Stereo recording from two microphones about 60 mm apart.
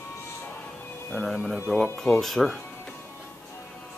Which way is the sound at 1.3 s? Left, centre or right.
Centre.